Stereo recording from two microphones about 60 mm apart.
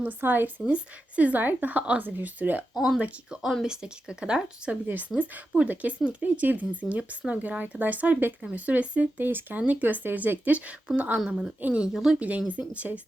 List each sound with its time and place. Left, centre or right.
0.0 s speech: right
0.6 s speech: right
2.7 s speech: centre
4.9 s speech: right
12.5 s speech: right